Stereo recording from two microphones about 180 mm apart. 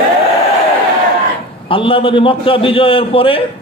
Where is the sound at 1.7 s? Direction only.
30° left (ahead or behind).